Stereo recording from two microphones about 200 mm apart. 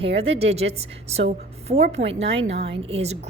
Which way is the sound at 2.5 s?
60° right (ahead or behind).